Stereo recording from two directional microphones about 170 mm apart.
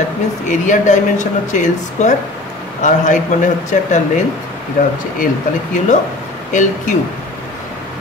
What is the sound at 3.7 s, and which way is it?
Speech, 45° left (ahead or behind).